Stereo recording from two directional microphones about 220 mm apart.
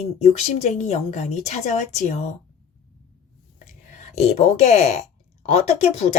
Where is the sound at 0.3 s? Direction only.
30° left (ahead or behind).